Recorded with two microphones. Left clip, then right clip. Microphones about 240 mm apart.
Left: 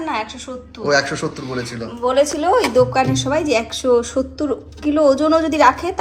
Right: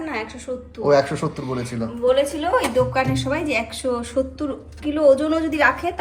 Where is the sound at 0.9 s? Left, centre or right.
Centre.